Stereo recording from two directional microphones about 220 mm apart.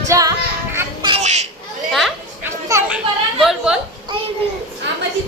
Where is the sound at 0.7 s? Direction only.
20° right (ahead or behind).